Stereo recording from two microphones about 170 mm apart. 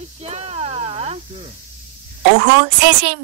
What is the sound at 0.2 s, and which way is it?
Snake, 40° right (ahead or behind).